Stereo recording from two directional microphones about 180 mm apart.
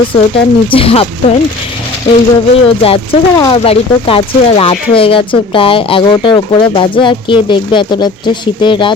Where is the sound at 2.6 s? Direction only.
30° left (ahead or behind).